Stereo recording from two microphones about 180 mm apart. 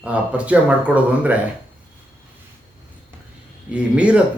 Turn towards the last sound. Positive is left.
turn(degrees=-5)  # may be behind; listen again after turning